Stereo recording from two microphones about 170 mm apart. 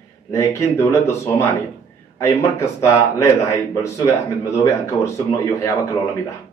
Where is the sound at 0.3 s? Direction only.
20° left (ahead or behind).